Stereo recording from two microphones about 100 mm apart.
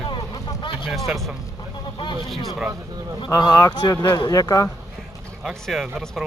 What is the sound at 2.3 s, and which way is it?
Speech, centre (ahead or behind).